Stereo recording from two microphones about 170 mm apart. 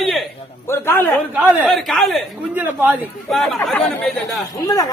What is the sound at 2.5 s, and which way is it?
Speech, 10° right (ahead or behind).